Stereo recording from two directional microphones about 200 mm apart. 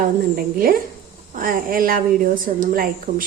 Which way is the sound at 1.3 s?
45° right (ahead or behind).